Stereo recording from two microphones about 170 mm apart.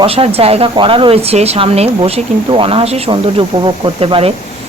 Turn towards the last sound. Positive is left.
turn(degrees=-35)  # may be behind; listen again after turning